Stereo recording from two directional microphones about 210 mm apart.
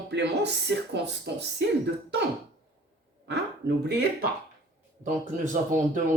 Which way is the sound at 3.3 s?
55° right (ahead or behind).